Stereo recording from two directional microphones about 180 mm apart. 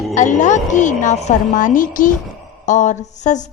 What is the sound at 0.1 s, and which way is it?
A woman's voice, 45° left (ahead or behind).